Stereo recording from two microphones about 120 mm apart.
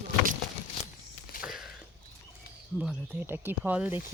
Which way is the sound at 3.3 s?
15° right (ahead or behind).